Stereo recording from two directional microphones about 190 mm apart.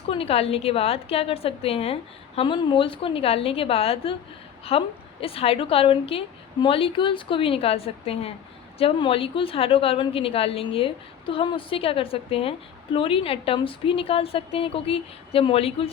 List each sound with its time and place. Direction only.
0.1 s a woman's voice: 30° left (ahead or behind)